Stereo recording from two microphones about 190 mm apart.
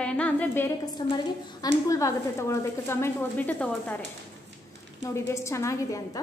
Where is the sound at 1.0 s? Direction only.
25° left (ahead or behind); by 4.0 s 10° left (ahead or behind).